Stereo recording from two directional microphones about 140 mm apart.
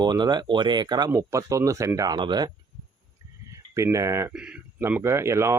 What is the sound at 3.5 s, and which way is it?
Speech, 20° right (ahead or behind).